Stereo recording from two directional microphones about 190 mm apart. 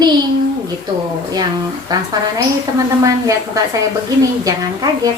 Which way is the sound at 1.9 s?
20° right (ahead or behind).